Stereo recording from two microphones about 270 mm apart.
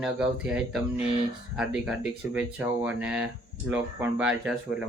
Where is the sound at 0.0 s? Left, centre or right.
Centre.